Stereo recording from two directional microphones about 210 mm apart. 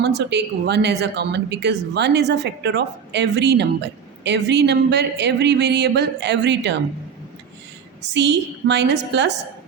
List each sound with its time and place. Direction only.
0.0 s a woman's voice: 55° right (ahead or behind)
8.1 s a woman's voice: 55° right (ahead or behind)